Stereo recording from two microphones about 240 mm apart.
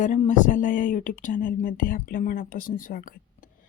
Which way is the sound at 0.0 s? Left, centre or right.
Left.